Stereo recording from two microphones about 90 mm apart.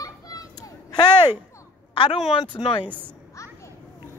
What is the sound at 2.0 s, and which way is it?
Speech, 75° left (ahead or behind).